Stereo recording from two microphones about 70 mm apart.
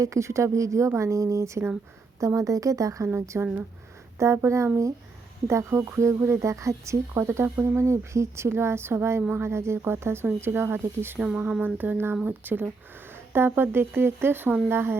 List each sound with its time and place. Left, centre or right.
0.0 s speech: right
11.2 s a sound: right
12.2 s speech: right